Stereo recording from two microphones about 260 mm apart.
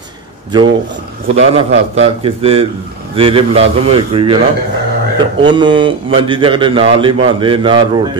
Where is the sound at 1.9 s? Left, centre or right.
Right.